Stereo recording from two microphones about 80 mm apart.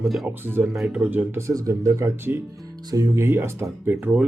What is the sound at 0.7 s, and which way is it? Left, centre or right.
Speech, centre.